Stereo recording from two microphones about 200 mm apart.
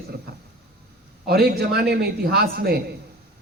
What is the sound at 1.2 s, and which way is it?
Speech, 50° right (ahead or behind).